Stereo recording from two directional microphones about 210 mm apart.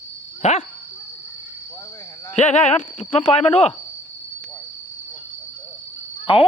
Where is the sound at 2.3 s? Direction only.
35° left (ahead or behind).